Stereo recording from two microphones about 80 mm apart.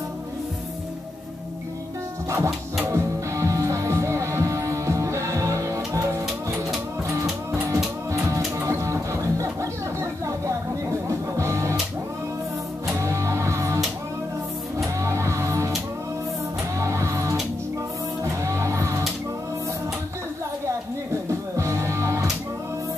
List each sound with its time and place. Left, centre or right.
2.2 s music: right
7.7 s music: right
13.0 s music: right
15.0 s music: right
16.7 s music: right
20.6 s music: right